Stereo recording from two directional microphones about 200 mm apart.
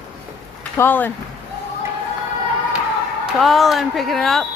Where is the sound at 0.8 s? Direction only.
10° left (ahead or behind).